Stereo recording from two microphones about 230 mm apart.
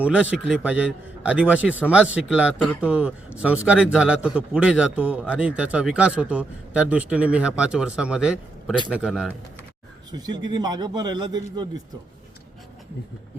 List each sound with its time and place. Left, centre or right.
0.0 s a man's voice: centre
10.1 s a man's voice: centre